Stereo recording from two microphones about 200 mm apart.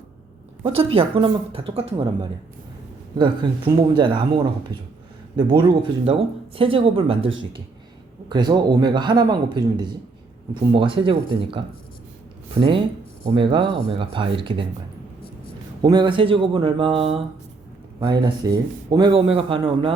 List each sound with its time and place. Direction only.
0.6 s speech: 25° right (ahead or behind)
3.2 s speech: 25° right (ahead or behind)
5.4 s speech: 20° right (ahead or behind)
15.8 s speech: 20° right (ahead or behind)